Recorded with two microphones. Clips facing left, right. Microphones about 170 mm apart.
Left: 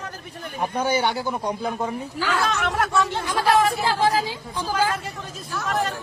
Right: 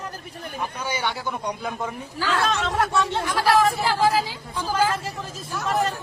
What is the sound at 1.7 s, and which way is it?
A woman's voice, 15° left (ahead or behind).